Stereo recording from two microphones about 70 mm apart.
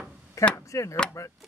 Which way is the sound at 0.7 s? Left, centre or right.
Left.